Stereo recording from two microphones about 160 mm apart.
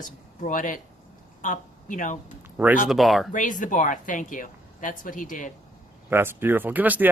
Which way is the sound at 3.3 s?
55° left (ahead or behind).